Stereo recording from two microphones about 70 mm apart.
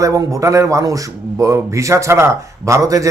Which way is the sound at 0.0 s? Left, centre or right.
Right.